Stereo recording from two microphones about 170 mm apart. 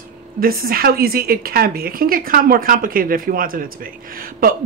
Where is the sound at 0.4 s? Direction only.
60° right (ahead or behind).